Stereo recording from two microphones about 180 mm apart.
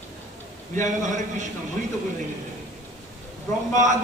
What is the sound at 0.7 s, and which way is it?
Speech, 45° right (ahead or behind).